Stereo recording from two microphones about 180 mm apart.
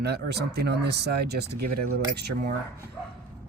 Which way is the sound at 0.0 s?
65° right (ahead or behind).